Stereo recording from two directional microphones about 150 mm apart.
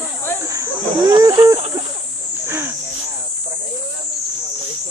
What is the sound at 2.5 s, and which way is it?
Wheeze, 15° right (ahead or behind).